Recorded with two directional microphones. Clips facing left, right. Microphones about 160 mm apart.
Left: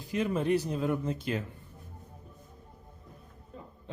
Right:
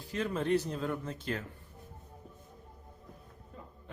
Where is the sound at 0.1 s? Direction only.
15° left (ahead or behind).